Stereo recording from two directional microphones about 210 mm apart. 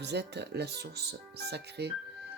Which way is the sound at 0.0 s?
50° right (ahead or behind).